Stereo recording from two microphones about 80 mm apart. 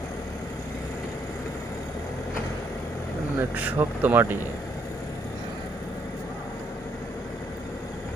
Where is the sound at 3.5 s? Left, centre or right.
Right.